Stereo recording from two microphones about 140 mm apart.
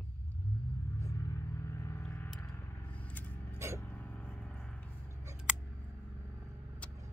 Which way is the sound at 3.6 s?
20° right (ahead or behind).